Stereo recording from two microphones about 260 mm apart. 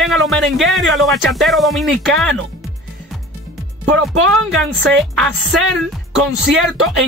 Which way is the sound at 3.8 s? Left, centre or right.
Right.